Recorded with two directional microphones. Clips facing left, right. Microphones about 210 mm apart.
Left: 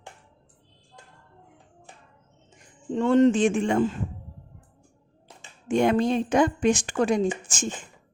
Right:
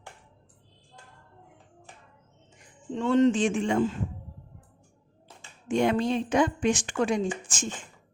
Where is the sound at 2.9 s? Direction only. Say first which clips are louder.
Left 3 dB; 50° left (ahead or behind).